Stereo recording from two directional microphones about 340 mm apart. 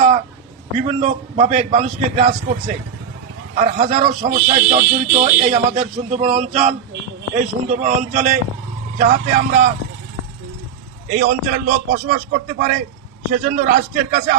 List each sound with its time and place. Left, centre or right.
0.8 s a man's voice: centre
11.1 s a man's voice: right